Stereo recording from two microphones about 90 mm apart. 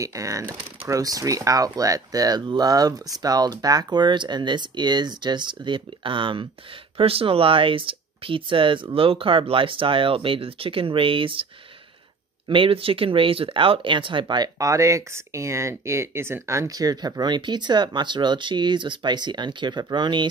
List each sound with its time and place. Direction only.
0.0 s speech: 35° right (ahead or behind); by 6.4 s 70° right (ahead or behind)
7.0 s speech: 85° right
12.4 s speech: 80° right; by 20.2 s 55° right (ahead or behind)